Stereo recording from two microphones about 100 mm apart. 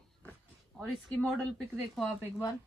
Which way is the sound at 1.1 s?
10° left (ahead or behind).